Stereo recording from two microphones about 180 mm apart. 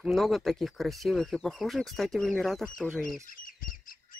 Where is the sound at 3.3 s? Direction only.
50° left (ahead or behind).